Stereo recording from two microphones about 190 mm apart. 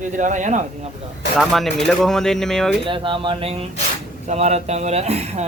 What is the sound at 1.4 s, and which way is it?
Speech, centre (ahead or behind).